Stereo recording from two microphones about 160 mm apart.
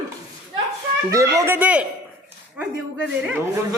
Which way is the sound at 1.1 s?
20° right (ahead or behind).